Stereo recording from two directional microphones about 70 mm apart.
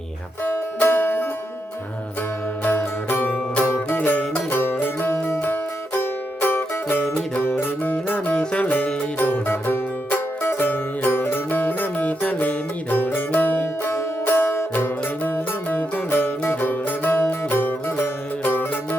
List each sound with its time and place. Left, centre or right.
0.4 s music: left
2.6 s music: left
4.5 s music: left
7.4 s music: left
15.3 s music: left